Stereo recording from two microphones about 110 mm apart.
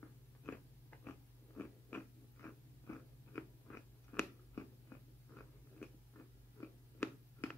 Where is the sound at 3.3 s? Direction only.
20° left (ahead or behind).